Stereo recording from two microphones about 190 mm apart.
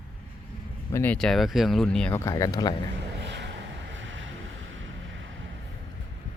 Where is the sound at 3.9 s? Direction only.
85° right.